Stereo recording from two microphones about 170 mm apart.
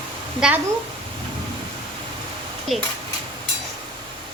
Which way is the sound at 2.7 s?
Centre (ahead or behind).